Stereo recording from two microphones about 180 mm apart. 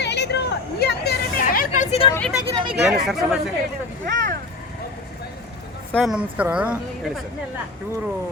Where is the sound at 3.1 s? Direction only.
Centre (ahead or behind).